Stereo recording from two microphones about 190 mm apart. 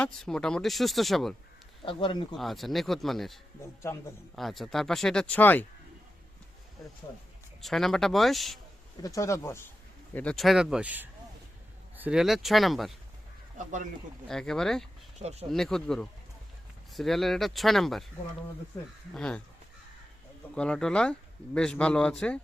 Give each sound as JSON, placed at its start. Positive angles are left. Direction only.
{"t": 0.0, "sound": "speech", "side_deg": 5}
{"t": 1.8, "sound": "speech", "side_deg": 25}
{"t": 2.3, "sound": "speech", "side_deg": 0}
{"t": 3.6, "sound": "speech", "side_deg": 15}
{"t": 4.4, "sound": "speech", "side_deg": 0}
{"t": 7.6, "sound": "speech", "side_deg": 0}
{"t": 9.0, "sound": "speech", "side_deg": 15}
{"t": 10.2, "sound": "speech", "side_deg": 5}
{"t": 14.3, "sound": "speech", "side_deg": 5}
{"t": 15.2, "sound": "speech", "side_deg": -35}
{"t": 15.5, "sound": "speech", "side_deg": 5}
{"t": 19.1, "sound": "speech", "side_deg": 5}
{"t": 20.6, "sound": "speech", "side_deg": 5}